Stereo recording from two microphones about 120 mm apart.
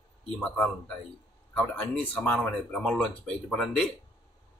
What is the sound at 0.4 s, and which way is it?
Speech, 15° left (ahead or behind).